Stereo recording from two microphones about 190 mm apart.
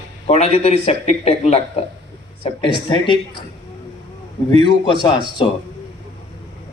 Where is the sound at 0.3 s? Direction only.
35° left (ahead or behind).